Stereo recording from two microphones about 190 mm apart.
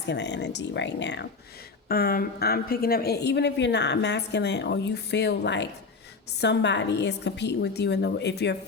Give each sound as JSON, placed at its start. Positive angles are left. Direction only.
{"t": 0.1, "sound": "speech", "side_deg": 65}
{"t": 1.9, "sound": "speech", "side_deg": 50}